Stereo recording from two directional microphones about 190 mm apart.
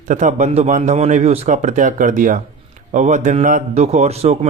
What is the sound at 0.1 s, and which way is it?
A man's voice, 40° right (ahead or behind).